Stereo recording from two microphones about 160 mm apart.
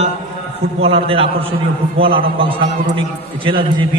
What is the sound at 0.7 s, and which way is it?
A man's voice, 35° right (ahead or behind).